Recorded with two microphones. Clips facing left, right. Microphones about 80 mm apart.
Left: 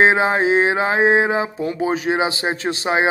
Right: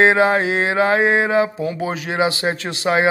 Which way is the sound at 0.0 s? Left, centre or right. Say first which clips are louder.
Right 1 dB; left.